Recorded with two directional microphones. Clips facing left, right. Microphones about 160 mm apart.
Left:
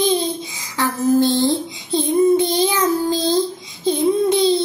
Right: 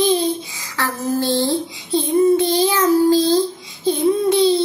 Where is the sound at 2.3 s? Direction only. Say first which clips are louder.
Right 1 dB; 20° left (ahead or behind).